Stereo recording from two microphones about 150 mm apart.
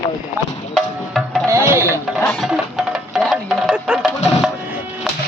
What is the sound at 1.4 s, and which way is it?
Music, 15° right (ahead or behind).